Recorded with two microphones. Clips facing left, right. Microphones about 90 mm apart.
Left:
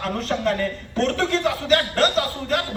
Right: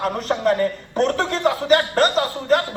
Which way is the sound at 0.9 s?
25° right (ahead or behind).